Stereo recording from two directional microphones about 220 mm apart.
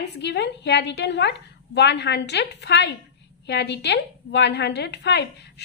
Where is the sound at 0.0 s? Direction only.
50° left (ahead or behind).